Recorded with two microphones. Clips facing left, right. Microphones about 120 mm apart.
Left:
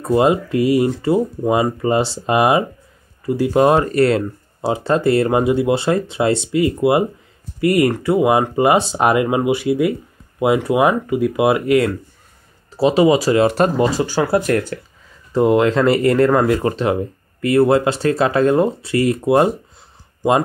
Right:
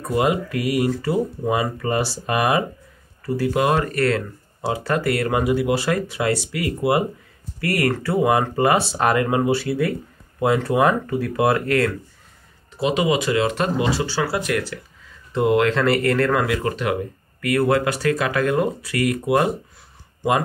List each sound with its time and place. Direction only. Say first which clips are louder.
0.0 s speech: left 5 dB; 25° left (ahead or behind)
3.5 s speech: left 8 dB; 30° left (ahead or behind); by 11.9 s 15° left (ahead or behind)
12.7 s speech: left 7 dB; 35° left (ahead or behind)